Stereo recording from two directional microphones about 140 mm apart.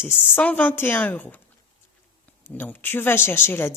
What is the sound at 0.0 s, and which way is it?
Speech, 15° left (ahead or behind).